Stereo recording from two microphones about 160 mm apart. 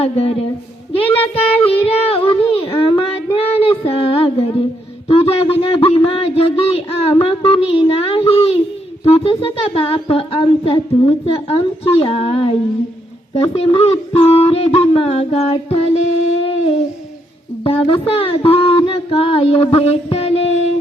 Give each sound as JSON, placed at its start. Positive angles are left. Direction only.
{"t": 0.0, "sound": "humming", "side_deg": 35}
{"t": 0.9, "sound": "child singing", "side_deg": 35}
{"t": 1.6, "sound": "speech", "side_deg": 35}
{"t": 3.3, "sound": "child singing", "side_deg": 35}
{"t": 5.0, "sound": "humming", "side_deg": 35}
{"t": 17.6, "sound": "humming", "side_deg": 35}